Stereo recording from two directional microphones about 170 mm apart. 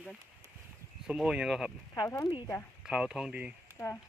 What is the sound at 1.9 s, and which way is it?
Speech, 15° left (ahead or behind).